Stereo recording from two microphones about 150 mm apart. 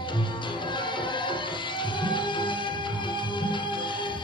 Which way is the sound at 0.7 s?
30° left (ahead or behind).